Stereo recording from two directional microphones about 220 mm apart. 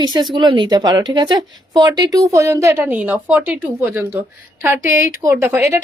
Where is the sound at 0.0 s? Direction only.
20° right (ahead or behind).